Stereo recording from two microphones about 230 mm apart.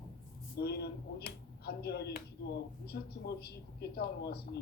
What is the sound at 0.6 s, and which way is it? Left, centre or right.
Speech, left.